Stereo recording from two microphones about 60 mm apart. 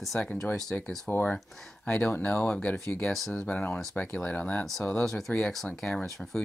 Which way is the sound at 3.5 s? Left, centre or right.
Left.